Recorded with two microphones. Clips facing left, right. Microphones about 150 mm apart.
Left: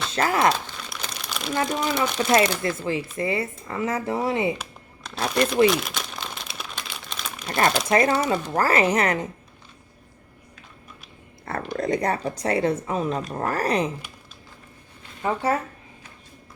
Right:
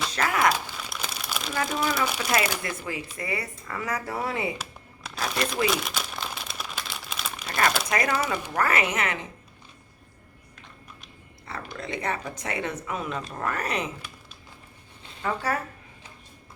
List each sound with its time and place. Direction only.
0.1 s a sound: 30° left (ahead or behind)
0.8 s crumpling: 5° right (ahead or behind)
2.0 s speech: 5° right (ahead or behind)
2.3 s speech: 30° left (ahead or behind)
5.2 s speech: centre (ahead or behind)
5.6 s crumpling: centre (ahead or behind)
7.4 s speech: 30° left (ahead or behind)
11.4 s speech: 50° left (ahead or behind); by 13.9 s 35° left (ahead or behind)
15.2 s speech: 25° left (ahead or behind)